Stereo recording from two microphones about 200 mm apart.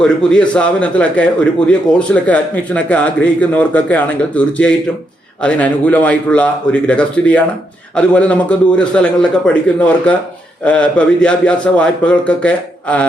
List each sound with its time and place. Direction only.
0.0 s a man's voice: 5° left (ahead or behind)